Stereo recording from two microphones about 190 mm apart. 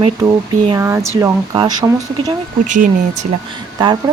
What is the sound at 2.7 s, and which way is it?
Speech, 40° right (ahead or behind).